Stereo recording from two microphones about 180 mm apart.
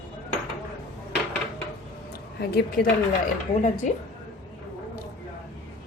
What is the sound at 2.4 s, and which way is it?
Speech, 60° left (ahead or behind).